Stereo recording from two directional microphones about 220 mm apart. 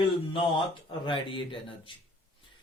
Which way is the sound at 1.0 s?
20° left (ahead or behind).